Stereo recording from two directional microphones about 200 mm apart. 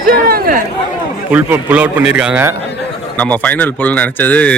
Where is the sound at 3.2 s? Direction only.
5° left (ahead or behind).